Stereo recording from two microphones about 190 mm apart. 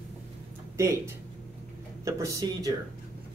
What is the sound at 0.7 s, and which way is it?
Speech, 15° right (ahead or behind).